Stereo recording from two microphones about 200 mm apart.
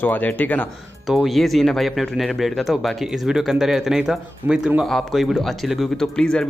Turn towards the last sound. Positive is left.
turn(degrees=5)  # may be behind; listen again after turning